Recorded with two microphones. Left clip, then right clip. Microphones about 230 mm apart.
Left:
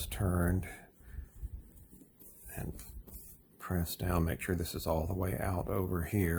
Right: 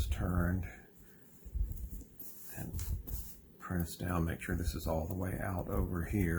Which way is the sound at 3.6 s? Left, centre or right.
Left.